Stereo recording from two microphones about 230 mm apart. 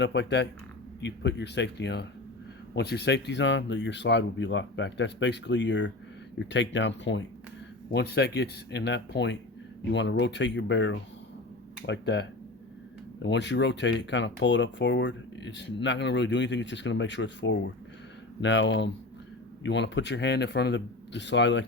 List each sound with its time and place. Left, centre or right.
0.0 s speech: left